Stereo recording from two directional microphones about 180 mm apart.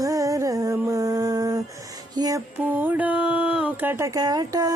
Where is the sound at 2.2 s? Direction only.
20° right (ahead or behind).